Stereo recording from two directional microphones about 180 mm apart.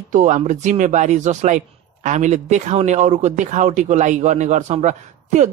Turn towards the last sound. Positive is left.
turn(degrees=-40)  # may be behind; listen again after turning